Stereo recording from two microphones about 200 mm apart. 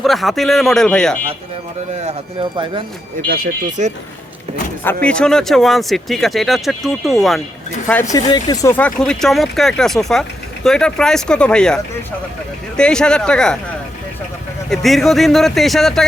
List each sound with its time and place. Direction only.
0.0 s speech: centre (ahead or behind)
2.0 s speech: 25° right (ahead or behind)
3.2 s speech: 45° right (ahead or behind)
5.0 s speech: 5° left (ahead or behind)
8.1 s speech: 20° left (ahead or behind)
8.6 s speech: 10° left (ahead or behind)
14.7 s speech: centre (ahead or behind)